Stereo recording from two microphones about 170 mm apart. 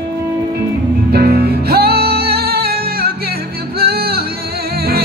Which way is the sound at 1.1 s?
65° right (ahead or behind).